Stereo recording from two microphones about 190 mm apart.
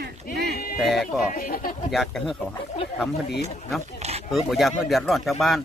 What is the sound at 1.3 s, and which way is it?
Speech, 50° left (ahead or behind).